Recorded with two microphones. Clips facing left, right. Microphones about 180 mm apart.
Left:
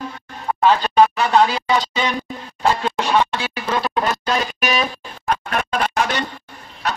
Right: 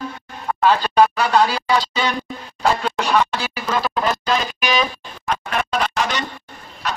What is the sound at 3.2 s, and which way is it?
Speech, centre (ahead or behind).